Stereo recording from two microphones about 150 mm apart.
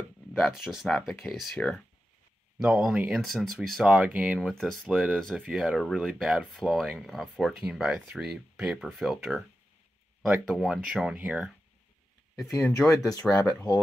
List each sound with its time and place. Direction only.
0.3 s speech: centre (ahead or behind)
12.4 s speech: 15° left (ahead or behind)
13.2 s speech: 10° left (ahead or behind)